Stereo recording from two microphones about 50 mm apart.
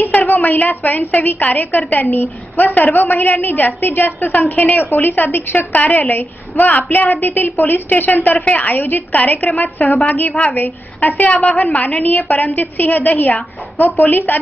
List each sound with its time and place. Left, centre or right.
0.3 s a woman's voice: left